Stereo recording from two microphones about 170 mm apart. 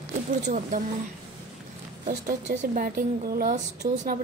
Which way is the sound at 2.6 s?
55° right (ahead or behind).